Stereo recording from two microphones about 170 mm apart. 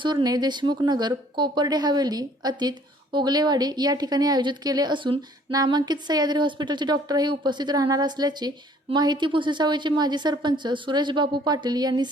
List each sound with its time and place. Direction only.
0.0 s speech: 25° right (ahead or behind)